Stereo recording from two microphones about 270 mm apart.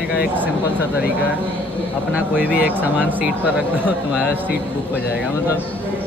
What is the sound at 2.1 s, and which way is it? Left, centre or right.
Speech, centre.